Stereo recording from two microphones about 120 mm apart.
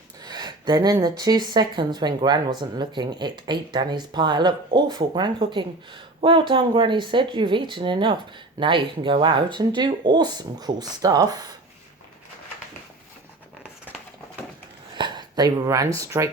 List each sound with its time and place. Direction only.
0.2 s a woman's voice: 35° right (ahead or behind)
14.9 s a sound: 35° right (ahead or behind)
16.0 s speech: 25° right (ahead or behind)